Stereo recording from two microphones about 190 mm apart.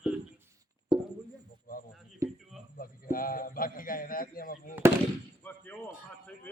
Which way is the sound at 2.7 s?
50° left (ahead or behind).